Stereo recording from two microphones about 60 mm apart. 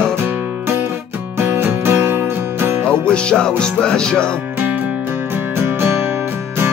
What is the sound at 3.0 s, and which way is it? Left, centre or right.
Music, centre.